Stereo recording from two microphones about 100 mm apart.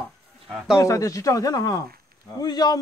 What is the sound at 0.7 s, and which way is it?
Speech, 35° left (ahead or behind).